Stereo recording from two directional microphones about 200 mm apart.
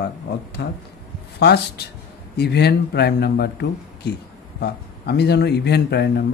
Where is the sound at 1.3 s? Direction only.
55° left (ahead or behind).